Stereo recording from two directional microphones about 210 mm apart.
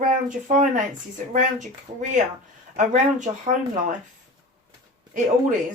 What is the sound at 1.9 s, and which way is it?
Speech, 30° right (ahead or behind).